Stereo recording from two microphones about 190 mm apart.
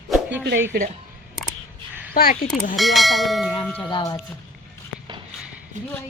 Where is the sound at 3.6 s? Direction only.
5° left (ahead or behind).